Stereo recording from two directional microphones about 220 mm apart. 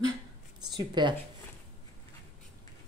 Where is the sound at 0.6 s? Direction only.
20° right (ahead or behind).